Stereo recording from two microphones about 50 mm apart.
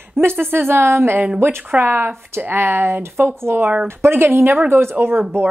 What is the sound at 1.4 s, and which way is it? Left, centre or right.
Speech, right.